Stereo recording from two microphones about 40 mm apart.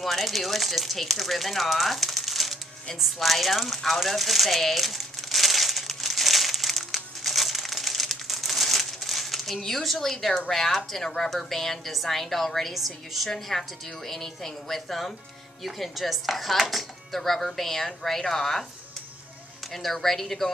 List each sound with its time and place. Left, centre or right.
0.0 s a sound: centre
10.5 s a woman's voice: centre
11.1 s chopping: centre
13.3 s a woman's voice: centre
15.6 s chopping: centre
17.5 s a woman's voice: centre
19.7 s a woman's voice: centre